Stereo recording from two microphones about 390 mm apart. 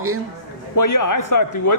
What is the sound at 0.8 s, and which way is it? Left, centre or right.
Speech, left.